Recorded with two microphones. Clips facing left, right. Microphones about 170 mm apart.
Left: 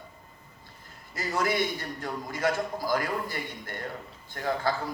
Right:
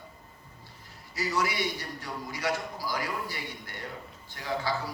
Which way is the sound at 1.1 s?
50° left (ahead or behind).